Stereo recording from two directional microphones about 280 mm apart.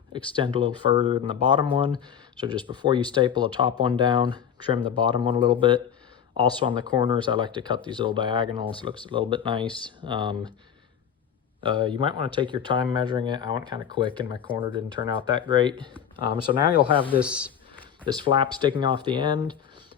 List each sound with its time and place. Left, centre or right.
0.4 s speech: centre
11.6 s speech: centre
14.5 s speech: centre
17.2 s speech: centre
18.0 s speech: centre